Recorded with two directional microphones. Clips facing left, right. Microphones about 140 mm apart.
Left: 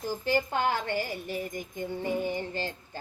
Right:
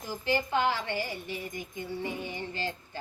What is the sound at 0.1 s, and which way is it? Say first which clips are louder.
Speech: even; 50° left (ahead or behind).